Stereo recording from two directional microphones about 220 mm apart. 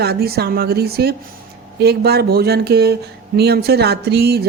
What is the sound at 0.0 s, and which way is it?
Speech, 45° right (ahead or behind).